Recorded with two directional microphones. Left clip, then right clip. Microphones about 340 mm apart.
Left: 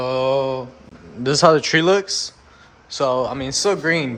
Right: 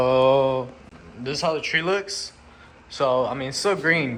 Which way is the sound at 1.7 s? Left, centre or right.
Centre.